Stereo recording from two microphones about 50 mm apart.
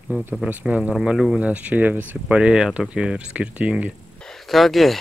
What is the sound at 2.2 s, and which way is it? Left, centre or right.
Speech, centre.